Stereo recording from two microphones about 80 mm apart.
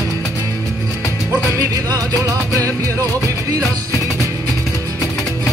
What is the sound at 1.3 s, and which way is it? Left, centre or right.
Music, right.